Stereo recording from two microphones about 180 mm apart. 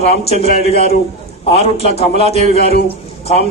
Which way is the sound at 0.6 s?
35° left (ahead or behind).